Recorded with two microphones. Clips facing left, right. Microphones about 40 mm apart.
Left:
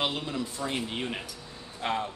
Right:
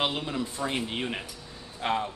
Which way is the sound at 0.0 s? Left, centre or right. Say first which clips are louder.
Right 1 dB; right.